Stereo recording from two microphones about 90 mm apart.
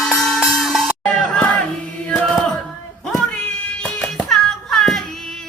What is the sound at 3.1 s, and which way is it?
Music, 10° left (ahead or behind).